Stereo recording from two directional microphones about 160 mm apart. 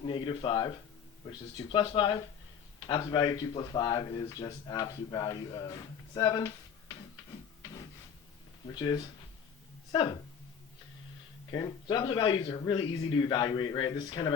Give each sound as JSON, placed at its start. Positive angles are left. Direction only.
{"t": 0.0, "sound": "speech", "side_deg": 30}
{"t": 7.6, "sound": "printer", "side_deg": 20}
{"t": 8.7, "sound": "speech", "side_deg": 25}
{"t": 11.5, "sound": "speech", "side_deg": 25}